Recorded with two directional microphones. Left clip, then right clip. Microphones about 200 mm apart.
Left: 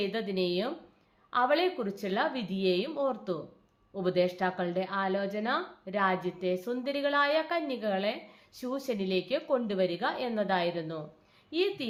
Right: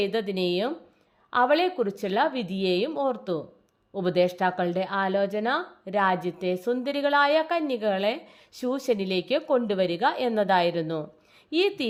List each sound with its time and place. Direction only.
0.0 s a woman's voice: 45° right (ahead or behind)